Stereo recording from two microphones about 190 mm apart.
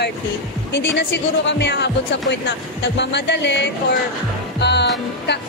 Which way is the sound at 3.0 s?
65° left (ahead or behind).